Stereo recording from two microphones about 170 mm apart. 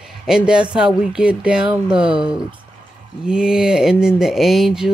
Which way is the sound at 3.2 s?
5° right (ahead or behind).